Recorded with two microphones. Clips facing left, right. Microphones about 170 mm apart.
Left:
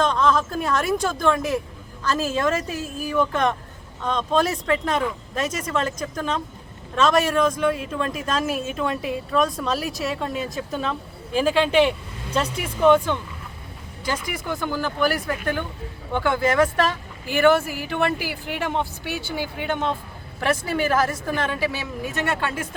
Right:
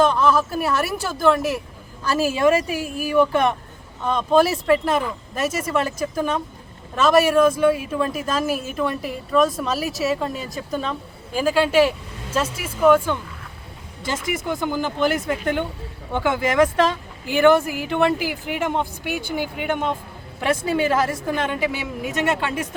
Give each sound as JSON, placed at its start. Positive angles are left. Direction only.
{"t": 0.0, "sound": "a woman's voice", "side_deg": -10}
{"t": 14.3, "sound": "a woman's voice", "side_deg": -20}